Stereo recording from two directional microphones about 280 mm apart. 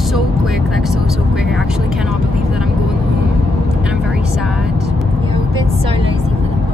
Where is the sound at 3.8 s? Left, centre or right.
Centre.